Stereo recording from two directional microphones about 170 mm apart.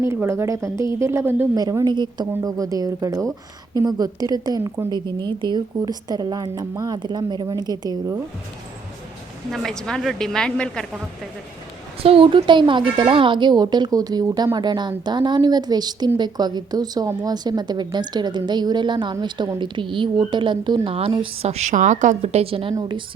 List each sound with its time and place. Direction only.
0.0 s a woman's voice: 15° right (ahead or behind)
9.5 s a woman's voice: 5° left (ahead or behind)
12.0 s speech: 30° right (ahead or behind)